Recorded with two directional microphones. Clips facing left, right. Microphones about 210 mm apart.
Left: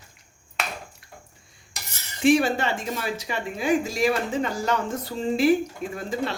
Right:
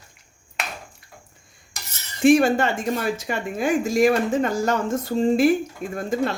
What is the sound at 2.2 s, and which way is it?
Speech, 50° right (ahead or behind).